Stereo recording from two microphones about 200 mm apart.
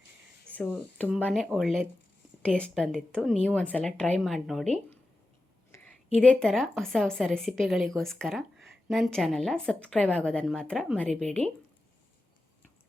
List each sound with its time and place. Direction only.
0.5 s a sound: 10° right (ahead or behind)
0.9 s speech: 5° left (ahead or behind)
5.7 s a woman's voice: 5° left (ahead or behind)